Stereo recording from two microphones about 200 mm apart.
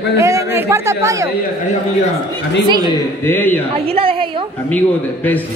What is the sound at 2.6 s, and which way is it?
Speech, 20° right (ahead or behind).